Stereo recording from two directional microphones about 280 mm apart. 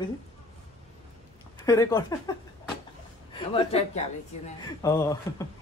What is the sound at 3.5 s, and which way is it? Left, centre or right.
Speech, left.